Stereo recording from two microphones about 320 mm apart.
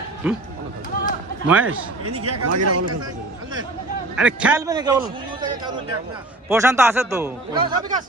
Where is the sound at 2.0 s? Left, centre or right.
Right.